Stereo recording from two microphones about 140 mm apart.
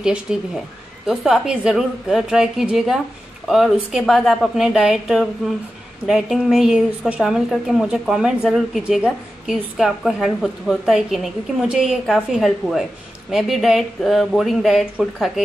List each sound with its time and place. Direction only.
0.0 s speech: 5° right (ahead or behind)